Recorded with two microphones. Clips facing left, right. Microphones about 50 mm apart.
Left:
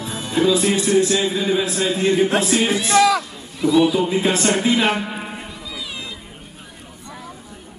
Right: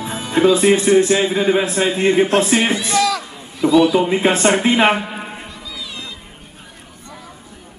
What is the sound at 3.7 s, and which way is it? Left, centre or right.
Speech, centre.